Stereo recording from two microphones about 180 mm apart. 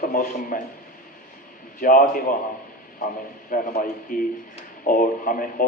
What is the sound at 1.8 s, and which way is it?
Speech, 50° left (ahead or behind).